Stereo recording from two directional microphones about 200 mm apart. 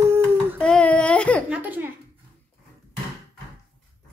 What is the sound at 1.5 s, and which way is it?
Speech, 10° right (ahead or behind).